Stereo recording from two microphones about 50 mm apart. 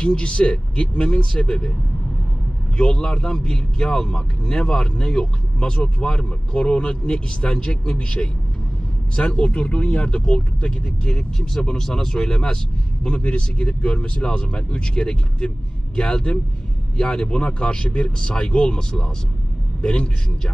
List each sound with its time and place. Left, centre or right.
0.0 s speech: centre
2.8 s speech: centre